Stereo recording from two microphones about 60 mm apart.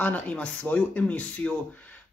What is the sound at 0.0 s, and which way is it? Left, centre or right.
Speech, left.